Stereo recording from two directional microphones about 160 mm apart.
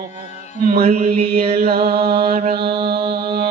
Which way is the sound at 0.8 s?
40° right (ahead or behind).